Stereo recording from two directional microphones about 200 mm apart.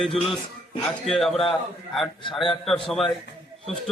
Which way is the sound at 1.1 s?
Centre (ahead or behind).